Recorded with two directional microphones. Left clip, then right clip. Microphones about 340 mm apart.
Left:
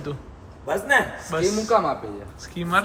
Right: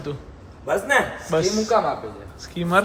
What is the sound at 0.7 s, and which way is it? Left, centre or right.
Speech, centre.